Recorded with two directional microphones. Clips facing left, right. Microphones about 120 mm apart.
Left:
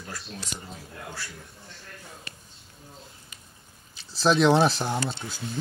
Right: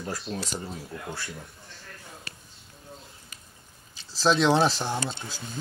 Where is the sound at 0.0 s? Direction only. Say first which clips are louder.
Right 7 dB; 40° right (ahead or behind).